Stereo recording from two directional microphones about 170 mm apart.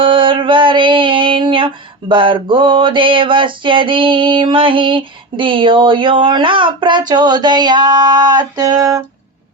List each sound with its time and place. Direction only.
0.0 s female singing: 30° right (ahead or behind)